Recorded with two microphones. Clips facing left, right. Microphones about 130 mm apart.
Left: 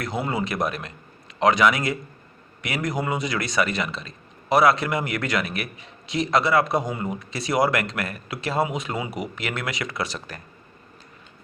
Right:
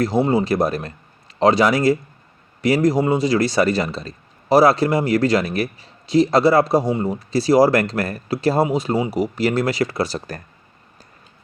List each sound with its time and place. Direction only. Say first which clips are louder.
0.0 s speech: right 9 dB; 30° right (ahead or behind)